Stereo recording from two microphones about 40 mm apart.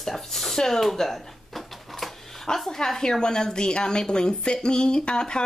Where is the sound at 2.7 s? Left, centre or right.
Centre.